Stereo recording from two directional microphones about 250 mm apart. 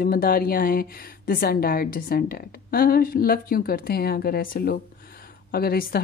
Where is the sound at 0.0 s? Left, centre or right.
Left.